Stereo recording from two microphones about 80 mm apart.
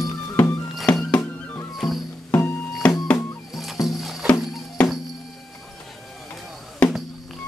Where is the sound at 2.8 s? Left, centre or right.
Centre.